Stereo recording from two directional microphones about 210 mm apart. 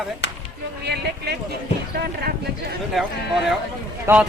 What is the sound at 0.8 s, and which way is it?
Speech, 50° right (ahead or behind).